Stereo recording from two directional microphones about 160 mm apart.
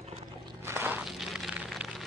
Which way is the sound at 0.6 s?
15° right (ahead or behind).